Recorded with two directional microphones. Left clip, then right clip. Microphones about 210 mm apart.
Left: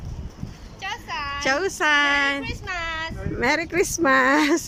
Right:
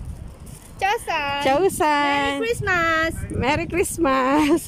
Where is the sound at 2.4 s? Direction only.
60° right (ahead or behind).